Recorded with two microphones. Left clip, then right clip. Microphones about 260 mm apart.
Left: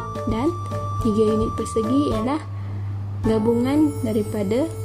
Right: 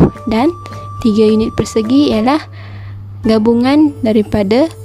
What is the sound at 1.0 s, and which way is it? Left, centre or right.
Speech, right.